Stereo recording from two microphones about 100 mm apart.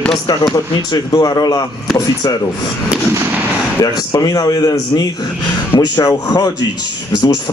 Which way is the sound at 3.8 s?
40° left (ahead or behind).